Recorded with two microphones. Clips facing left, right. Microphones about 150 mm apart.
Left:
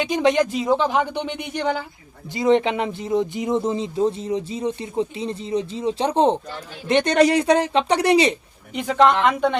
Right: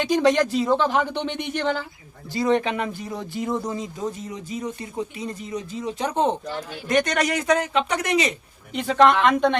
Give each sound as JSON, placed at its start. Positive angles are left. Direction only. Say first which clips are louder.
{"t": 0.0, "sound": "speech", "louder": "even", "side_deg": 20}
{"t": 2.3, "sound": "speech", "louder": "left 3 dB", "side_deg": 20}
{"t": 8.7, "sound": "speech", "louder": "even", "side_deg": 15}